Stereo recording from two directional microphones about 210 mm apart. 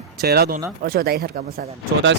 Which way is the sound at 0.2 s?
50° right (ahead or behind).